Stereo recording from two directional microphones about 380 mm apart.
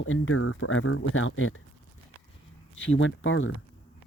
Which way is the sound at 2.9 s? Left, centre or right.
Left.